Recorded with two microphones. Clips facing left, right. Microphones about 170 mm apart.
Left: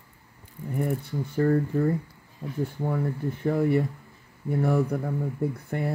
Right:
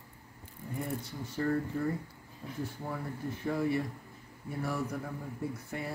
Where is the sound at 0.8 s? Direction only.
55° left (ahead or behind).